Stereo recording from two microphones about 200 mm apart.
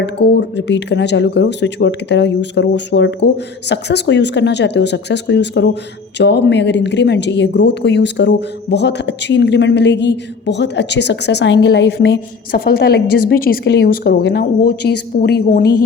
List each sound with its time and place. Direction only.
0.0 s speech: 60° left (ahead or behind); by 15.8 s 45° left (ahead or behind)